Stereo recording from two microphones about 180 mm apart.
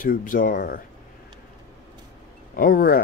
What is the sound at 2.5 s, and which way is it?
Speech, 50° left (ahead or behind).